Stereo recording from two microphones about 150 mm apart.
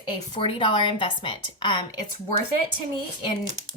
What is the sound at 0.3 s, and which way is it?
A woman's voice, 35° left (ahead or behind).